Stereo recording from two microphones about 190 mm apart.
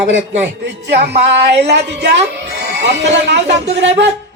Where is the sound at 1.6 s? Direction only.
65° right (ahead or behind).